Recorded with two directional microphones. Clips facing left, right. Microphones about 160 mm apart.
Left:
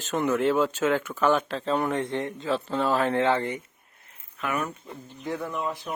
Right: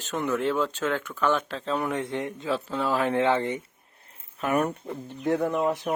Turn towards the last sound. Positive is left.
turn(degrees=-60)  # may be behind; listen again after turning